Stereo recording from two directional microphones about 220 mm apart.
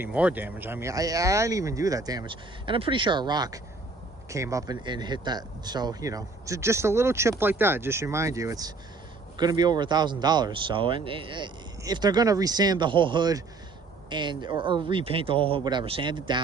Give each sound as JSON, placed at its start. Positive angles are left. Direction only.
{"t": 0.0, "sound": "speech", "side_deg": -5}